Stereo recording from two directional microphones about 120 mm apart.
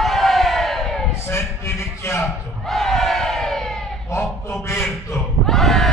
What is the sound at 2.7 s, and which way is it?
Crowd, centre (ahead or behind).